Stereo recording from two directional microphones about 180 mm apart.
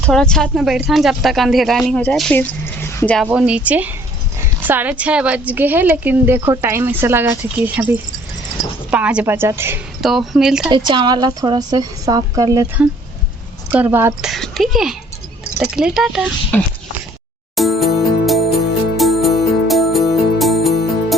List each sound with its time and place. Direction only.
0.0 s speech: 5° left (ahead or behind)
3.2 s a woman's voice: 5° right (ahead or behind)
10.0 s speech: centre (ahead or behind)
10.7 s a woman's voice: 25° right (ahead or behind)
14.3 s speech: centre (ahead or behind)
17.5 s music: centre (ahead or behind)